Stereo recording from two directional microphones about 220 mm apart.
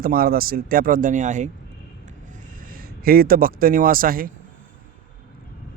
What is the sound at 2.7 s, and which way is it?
Speech, 40° right (ahead or behind).